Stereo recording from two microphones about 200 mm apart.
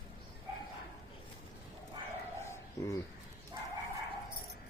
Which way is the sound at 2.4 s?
15° left (ahead or behind).